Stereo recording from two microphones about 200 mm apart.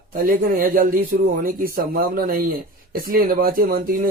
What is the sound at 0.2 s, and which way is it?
Speech, 45° right (ahead or behind).